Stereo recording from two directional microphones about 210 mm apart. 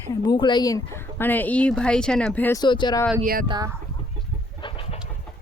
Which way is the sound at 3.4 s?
20° right (ahead or behind).